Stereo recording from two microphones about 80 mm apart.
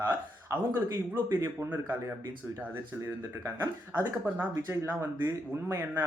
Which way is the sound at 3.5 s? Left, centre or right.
Right.